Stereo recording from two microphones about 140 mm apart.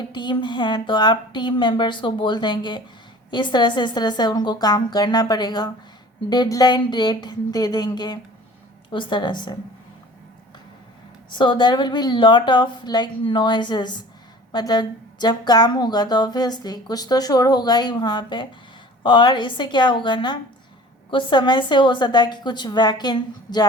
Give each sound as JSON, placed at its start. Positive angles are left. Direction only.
{"t": 0.1, "sound": "a woman's voice", "side_deg": 35}
{"t": 11.3, "sound": "a woman's voice", "side_deg": 35}